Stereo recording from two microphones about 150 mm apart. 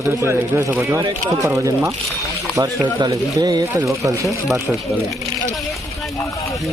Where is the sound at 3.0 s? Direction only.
25° right (ahead or behind).